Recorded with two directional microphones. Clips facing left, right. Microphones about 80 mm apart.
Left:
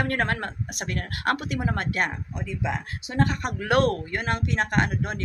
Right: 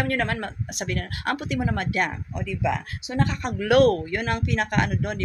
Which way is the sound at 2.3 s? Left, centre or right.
Left.